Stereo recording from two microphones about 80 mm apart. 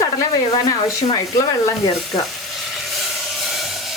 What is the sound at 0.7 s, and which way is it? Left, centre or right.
Speech, left.